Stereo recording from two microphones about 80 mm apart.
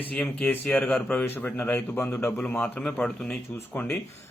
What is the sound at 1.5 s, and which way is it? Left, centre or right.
A man's voice, left.